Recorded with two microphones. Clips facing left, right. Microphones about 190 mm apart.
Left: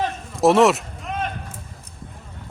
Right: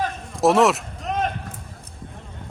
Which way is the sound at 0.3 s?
Centre (ahead or behind).